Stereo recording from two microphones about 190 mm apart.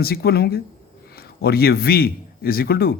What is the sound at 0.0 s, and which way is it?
A man's voice, 55° left (ahead or behind).